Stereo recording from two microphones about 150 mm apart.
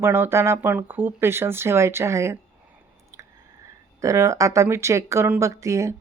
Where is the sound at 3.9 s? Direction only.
20° right (ahead or behind).